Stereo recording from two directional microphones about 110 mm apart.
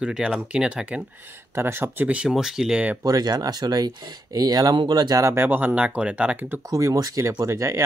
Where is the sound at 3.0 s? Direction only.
35° right (ahead or behind); by 6.6 s 15° right (ahead or behind).